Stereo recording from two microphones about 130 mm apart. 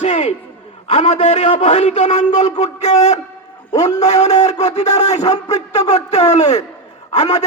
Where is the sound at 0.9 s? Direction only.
55° left (ahead or behind).